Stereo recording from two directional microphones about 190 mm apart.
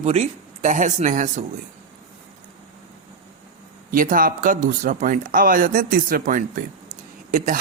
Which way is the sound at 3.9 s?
45° right (ahead or behind).